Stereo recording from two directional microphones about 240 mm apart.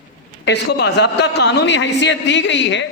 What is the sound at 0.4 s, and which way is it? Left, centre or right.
A man's voice, left.